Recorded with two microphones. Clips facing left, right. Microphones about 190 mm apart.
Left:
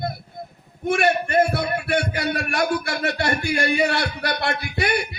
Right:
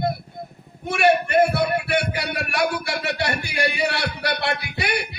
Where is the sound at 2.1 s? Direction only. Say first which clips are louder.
Left 1 dB; 50° left (ahead or behind).